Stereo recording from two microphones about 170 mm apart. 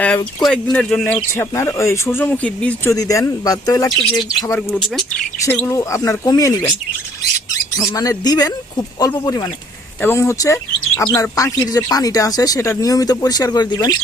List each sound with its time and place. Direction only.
0.4 s speech: 5° left (ahead or behind)
2.9 s speech: 20° left (ahead or behind)
4.7 s speech: 5° left (ahead or behind)
5.5 s speech: 15° left (ahead or behind)